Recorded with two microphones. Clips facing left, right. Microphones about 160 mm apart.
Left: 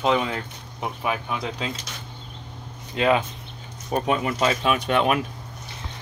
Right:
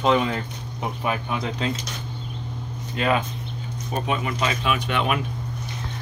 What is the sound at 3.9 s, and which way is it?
Speech, 40° left (ahead or behind).